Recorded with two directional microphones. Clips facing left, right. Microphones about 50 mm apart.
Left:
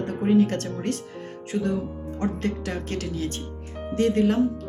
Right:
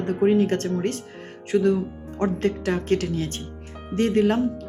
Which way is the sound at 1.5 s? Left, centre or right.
Right.